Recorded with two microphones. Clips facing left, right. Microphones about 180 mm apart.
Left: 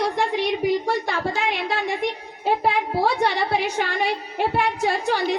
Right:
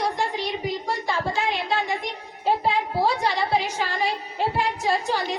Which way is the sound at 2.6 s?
65° left (ahead or behind).